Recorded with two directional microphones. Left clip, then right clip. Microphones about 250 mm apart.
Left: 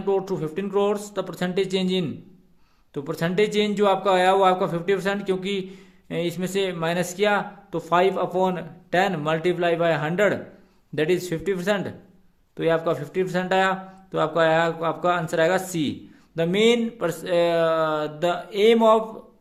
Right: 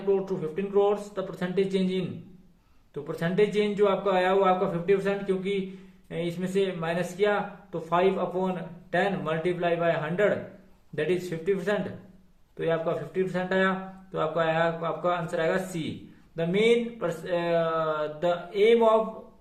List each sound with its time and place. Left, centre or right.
0.1 s a man's voice: left